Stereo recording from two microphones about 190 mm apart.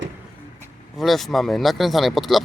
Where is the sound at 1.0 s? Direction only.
Centre (ahead or behind).